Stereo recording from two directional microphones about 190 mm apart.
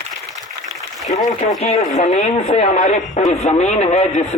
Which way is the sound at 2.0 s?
35° left (ahead or behind).